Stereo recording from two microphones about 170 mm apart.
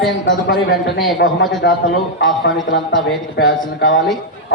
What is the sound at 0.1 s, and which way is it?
Speech, 90° left.